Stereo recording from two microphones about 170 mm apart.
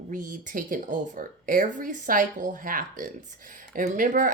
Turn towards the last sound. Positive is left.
turn(degrees=-50)  # may be behind; listen again after turning